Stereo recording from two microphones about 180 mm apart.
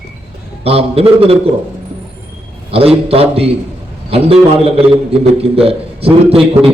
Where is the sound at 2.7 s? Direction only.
35° right (ahead or behind).